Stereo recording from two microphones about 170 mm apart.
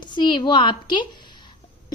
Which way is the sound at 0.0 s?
25° left (ahead or behind).